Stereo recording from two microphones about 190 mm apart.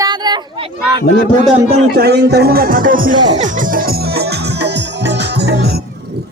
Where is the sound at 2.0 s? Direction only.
60° right (ahead or behind).